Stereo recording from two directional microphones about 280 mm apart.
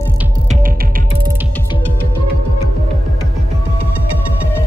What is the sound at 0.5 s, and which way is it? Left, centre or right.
Music, right.